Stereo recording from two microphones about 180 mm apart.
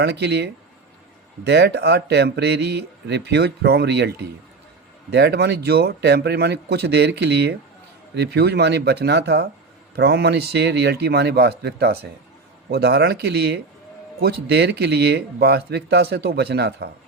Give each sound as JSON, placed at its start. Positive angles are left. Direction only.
{"t": 0.0, "sound": "speech", "side_deg": -65}